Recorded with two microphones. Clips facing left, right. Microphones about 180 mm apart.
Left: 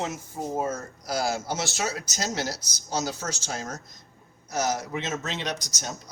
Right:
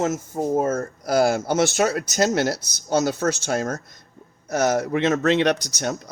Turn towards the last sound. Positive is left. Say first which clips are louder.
# right 11 dB
turn(degrees=-65)  # may be behind; listen again after turning